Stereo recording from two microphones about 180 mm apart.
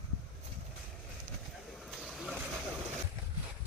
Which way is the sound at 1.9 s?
Centre (ahead or behind).